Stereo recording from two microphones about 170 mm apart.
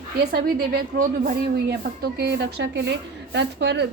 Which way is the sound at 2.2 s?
90° right.